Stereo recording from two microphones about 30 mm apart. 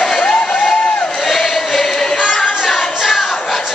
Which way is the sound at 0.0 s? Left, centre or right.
Left.